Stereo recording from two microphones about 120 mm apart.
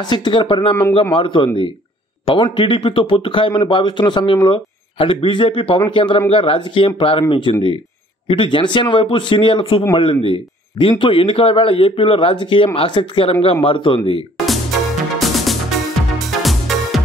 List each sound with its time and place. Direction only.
0.0 s a man's voice: 35° left (ahead or behind)
15.1 s music: centre (ahead or behind)